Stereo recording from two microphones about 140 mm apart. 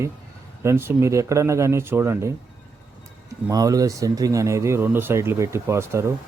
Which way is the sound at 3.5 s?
25° right (ahead or behind).